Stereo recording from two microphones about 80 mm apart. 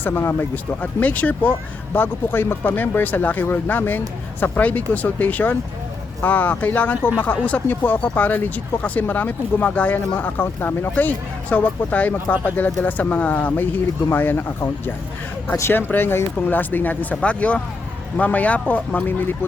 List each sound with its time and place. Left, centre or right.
0.0 s speech: left
15.7 s speech: left